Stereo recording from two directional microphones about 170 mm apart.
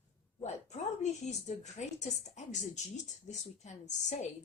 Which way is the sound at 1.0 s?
45° left (ahead or behind).